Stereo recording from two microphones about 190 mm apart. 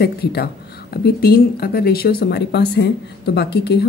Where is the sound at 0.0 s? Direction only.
55° left (ahead or behind).